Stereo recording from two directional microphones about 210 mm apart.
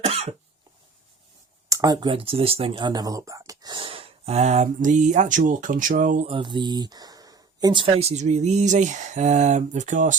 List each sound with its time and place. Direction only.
0.0 s cough: 30° right (ahead or behind)
1.7 s speech: 15° right (ahead or behind); by 10.2 s 35° right (ahead or behind)